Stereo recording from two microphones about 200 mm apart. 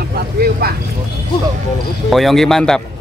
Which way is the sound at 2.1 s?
Centre (ahead or behind).